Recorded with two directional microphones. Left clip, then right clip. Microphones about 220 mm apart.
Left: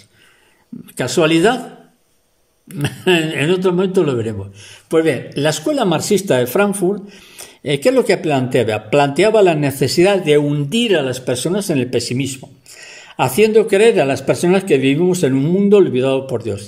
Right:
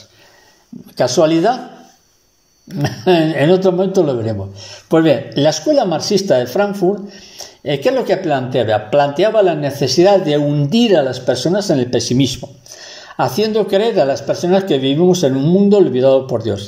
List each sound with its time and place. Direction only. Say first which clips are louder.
0.9 s speech: right 2 dB; 15° left (ahead or behind)
2.8 s speech: right 2 dB; 15° left (ahead or behind)